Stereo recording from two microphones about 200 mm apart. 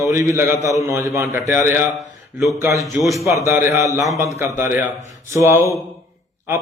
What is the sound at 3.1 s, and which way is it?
Speech, 15° right (ahead or behind).